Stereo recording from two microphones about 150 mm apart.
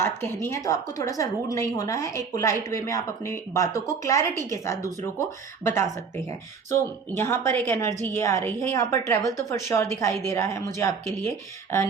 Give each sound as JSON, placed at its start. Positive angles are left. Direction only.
{"t": 0.0, "sound": "a woman's voice", "side_deg": 15}
{"t": 7.2, "sound": "a woman's voice", "side_deg": 15}